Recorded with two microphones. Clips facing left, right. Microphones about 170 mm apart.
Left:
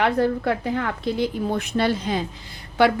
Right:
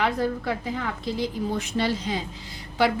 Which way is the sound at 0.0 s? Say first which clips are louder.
Left 5 dB; 60° left (ahead or behind).